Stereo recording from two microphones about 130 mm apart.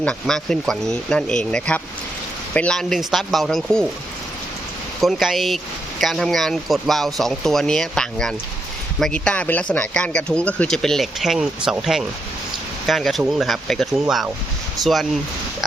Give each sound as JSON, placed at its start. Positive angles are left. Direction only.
{"t": 0.0, "sound": "a man's voice", "side_deg": 5}
{"t": 4.9, "sound": "a man's voice", "side_deg": 0}